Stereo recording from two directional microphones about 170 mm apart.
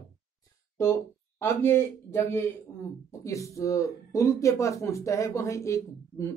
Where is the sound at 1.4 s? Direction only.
15° left (ahead or behind).